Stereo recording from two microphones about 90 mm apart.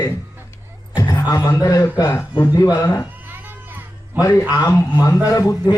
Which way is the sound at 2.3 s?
60° left (ahead or behind).